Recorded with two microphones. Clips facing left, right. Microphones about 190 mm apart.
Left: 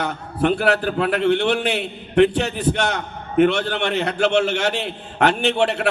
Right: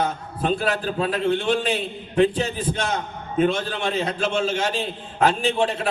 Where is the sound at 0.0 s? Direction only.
70° left (ahead or behind).